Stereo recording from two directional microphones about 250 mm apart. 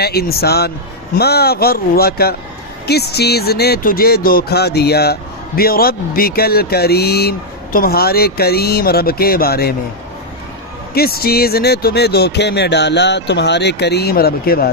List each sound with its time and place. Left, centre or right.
0.0 s speech: left
10.9 s speech: left